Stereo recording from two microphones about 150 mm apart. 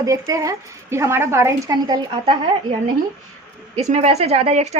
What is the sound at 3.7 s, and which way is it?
A woman's voice, 45° right (ahead or behind).